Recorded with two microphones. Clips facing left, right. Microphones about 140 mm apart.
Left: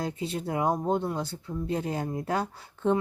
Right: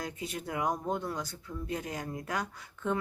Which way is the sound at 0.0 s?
30° left (ahead or behind).